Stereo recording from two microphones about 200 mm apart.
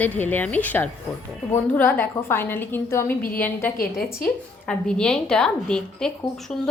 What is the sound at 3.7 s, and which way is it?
Speech, 45° left (ahead or behind).